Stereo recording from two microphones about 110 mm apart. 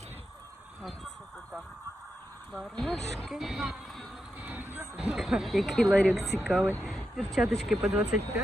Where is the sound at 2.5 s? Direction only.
Centre (ahead or behind).